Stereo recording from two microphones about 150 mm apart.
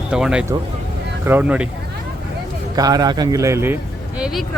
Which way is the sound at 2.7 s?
25° right (ahead or behind).